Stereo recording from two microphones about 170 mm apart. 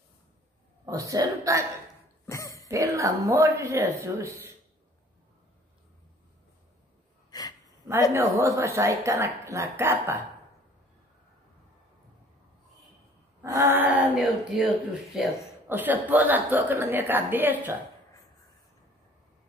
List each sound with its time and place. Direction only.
0.8 s a woman's voice: 20° right (ahead or behind)
2.2 s cough: 15° left (ahead or behind)
2.7 s a woman's voice: 20° right (ahead or behind)
7.2 s gasp: 25° left (ahead or behind)
8.1 s a woman's voice: 15° right (ahead or behind)
13.4 s a woman's voice: 15° right (ahead or behind)
15.7 s a woman's voice: 10° right (ahead or behind)